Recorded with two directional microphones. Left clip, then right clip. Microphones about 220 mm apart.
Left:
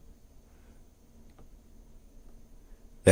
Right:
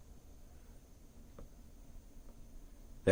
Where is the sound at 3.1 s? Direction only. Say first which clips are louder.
Left 9 dB; 50° left (ahead or behind).